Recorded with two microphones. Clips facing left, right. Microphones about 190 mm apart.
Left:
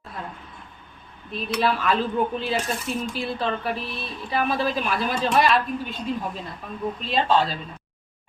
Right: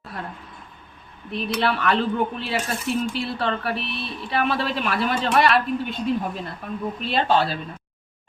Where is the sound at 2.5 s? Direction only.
70° right (ahead or behind).